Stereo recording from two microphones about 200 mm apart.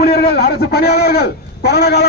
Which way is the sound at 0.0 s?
50° left (ahead or behind).